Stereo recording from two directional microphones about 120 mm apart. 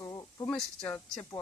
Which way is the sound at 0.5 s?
10° left (ahead or behind).